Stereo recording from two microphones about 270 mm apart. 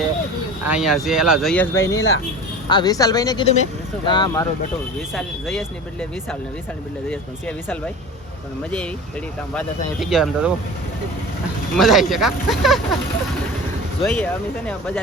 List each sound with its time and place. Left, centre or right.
0.6 s speech: centre
1.8 s speech: left
2.6 s speech: centre
4.9 s speech: centre
9.6 s speech: centre
11.8 s speech: centre
14.0 s speech: centre